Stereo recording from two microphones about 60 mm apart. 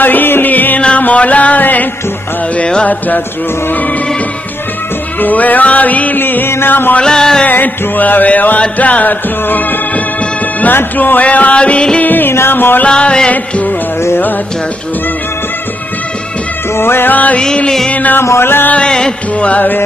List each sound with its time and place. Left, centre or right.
0.0 s music: left
2.5 s music: centre
5.2 s music: left
7.0 s music: centre
7.4 s music: left
12.0 s music: left
12.8 s music: centre
16.7 s music: left
18.2 s music: left
18.7 s music: centre
19.5 s music: left